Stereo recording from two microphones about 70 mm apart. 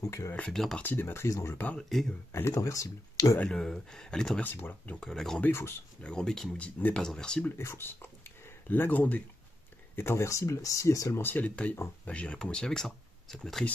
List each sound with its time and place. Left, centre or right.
0.0 s speech: left
0.5 s speech: centre
0.8 s speech: left
1.8 s speech: centre
2.5 s speech: left
3.4 s speech: centre
4.4 s speech: left
5.0 s speech: centre
5.5 s speech: left
6.0 s speech: centre
7.4 s speech: left
9.9 s speech: left
11.1 s speech: left
11.4 s speech: centre